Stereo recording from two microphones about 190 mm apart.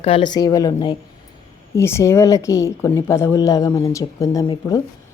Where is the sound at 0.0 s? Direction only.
25° left (ahead or behind).